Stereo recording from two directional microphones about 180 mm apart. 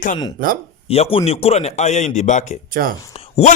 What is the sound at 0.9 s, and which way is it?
Speech, 30° left (ahead or behind).